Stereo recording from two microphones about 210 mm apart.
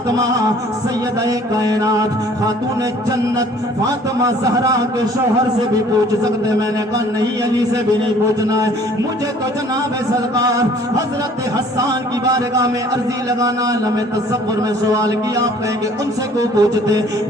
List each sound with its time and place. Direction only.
0.2 s speech: 15° right (ahead or behind)
1.5 s speech: 15° right (ahead or behind)
3.8 s speech: 15° right (ahead or behind)
8.4 s speech: 15° right (ahead or behind)
10.3 s speech: 15° right (ahead or behind)
14.9 s speech: 15° right (ahead or behind)